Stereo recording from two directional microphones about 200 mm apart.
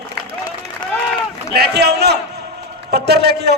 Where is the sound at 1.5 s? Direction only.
55° right (ahead or behind).